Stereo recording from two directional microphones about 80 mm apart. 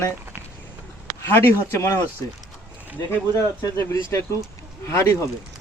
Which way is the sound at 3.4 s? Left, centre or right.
Left.